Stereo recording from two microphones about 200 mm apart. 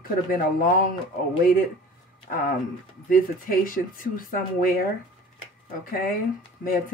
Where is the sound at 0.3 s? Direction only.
45° left (ahead or behind).